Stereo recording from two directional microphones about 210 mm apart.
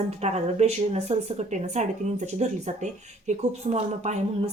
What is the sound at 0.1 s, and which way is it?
Speech, 30° right (ahead or behind).